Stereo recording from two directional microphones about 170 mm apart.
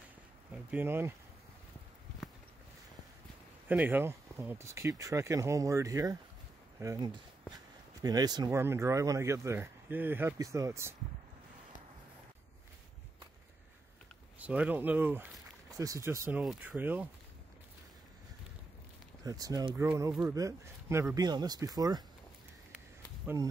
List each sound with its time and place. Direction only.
0.7 s speech: 10° right (ahead or behind)
3.6 s speech: 10° right (ahead or behind)
14.4 s speech: 10° right (ahead or behind)
19.2 s speech: 20° right (ahead or behind)